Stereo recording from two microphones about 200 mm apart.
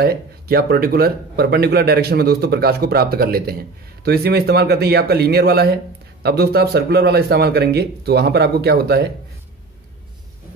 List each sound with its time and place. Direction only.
0.0 s speech: 50° right (ahead or behind)